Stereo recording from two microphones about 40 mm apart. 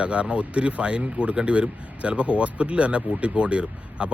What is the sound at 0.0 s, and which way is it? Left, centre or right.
Speech, right.